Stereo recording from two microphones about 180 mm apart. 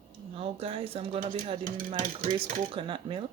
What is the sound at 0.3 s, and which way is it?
Speech, 30° right (ahead or behind).